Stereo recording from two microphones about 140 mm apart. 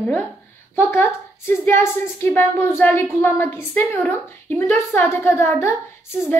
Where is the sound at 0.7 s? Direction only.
15° left (ahead or behind).